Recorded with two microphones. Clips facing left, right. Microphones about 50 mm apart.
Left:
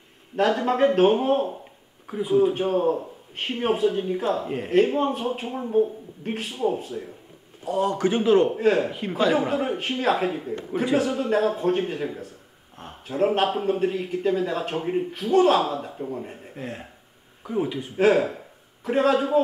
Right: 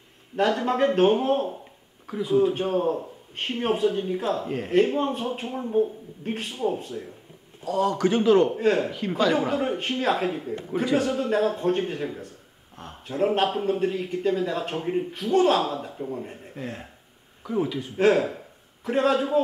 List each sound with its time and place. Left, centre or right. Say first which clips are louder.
0.4 s a man's voice: left 2 dB; centre
2.3 s a man's voice: left 1 dB; centre
7.6 s a man's voice: even; centre
8.5 s a man's voice: left 2 dB; centre